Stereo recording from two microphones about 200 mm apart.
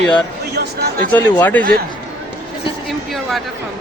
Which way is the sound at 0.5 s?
55° right (ahead or behind).